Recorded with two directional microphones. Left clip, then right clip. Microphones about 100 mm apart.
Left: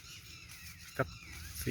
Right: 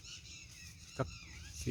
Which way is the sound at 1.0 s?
10° right (ahead or behind).